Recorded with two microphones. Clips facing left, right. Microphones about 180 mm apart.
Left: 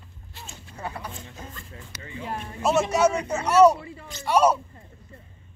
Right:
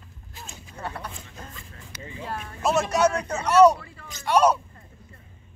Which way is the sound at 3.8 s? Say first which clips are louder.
Left 5 dB; 25° left (ahead or behind).